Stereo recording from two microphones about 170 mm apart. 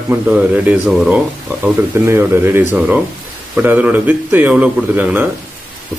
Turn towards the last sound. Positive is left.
turn(degrees=-10)  # may be behind; listen again after turning